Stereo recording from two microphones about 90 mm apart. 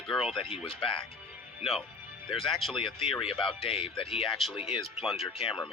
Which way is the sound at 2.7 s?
70° left (ahead or behind).